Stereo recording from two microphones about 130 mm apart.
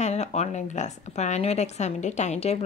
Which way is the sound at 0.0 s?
60° left (ahead or behind).